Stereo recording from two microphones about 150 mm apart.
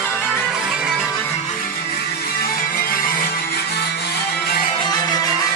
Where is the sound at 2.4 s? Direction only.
75° left (ahead or behind).